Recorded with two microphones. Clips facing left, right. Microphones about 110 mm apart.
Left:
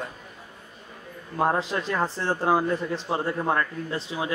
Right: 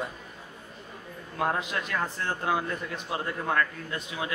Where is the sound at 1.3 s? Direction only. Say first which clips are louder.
Left 5 dB; 30° left (ahead or behind).